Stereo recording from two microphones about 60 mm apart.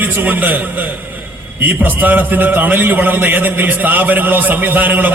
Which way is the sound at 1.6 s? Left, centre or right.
Right.